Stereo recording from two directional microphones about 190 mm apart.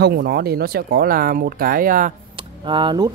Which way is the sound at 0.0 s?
55° right (ahead or behind).